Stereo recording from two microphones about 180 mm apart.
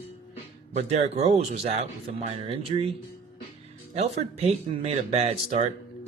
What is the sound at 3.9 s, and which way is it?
Speech, 35° right (ahead or behind).